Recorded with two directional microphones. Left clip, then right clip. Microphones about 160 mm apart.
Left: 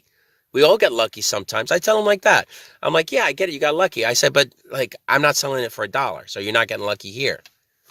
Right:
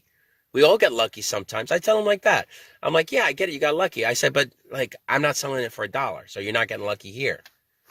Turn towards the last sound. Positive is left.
turn(degrees=35)  # may be behind; listen again after turning